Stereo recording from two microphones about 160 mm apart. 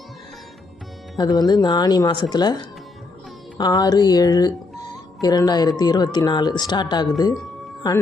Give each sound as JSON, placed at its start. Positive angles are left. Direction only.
{"t": 1.2, "sound": "speech", "side_deg": 25}